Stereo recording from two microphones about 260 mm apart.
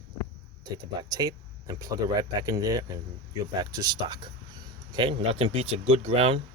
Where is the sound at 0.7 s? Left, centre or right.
Centre.